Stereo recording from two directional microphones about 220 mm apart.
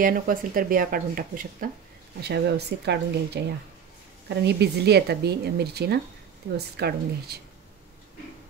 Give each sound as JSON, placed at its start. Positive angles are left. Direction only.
{"t": 0.0, "sound": "speech", "side_deg": -40}